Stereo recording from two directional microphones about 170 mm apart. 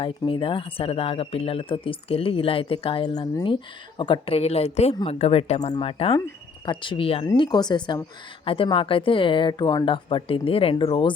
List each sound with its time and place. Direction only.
0.0 s speech: 30° left (ahead or behind)